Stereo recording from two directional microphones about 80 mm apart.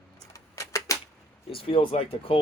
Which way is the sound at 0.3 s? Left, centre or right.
Left.